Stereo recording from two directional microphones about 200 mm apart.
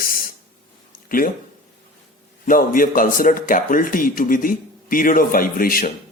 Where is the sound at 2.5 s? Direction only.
45° left (ahead or behind).